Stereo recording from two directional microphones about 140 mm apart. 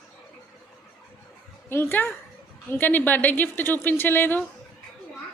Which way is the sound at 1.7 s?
15° left (ahead or behind).